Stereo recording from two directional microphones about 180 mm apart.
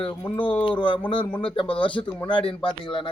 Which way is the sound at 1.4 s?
30° left (ahead or behind).